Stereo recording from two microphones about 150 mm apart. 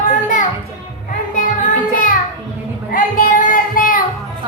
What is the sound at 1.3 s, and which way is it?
Music, 60° left (ahead or behind).